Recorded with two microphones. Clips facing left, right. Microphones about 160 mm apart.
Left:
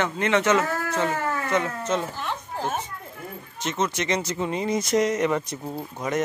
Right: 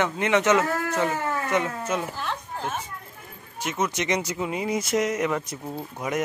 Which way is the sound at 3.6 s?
10° right (ahead or behind).